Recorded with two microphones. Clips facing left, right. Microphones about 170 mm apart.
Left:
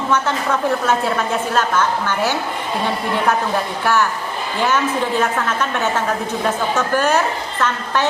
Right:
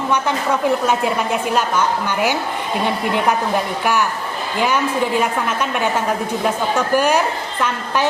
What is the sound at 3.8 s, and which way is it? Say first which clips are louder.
Speech: left 3 dB; 15° right (ahead or behind).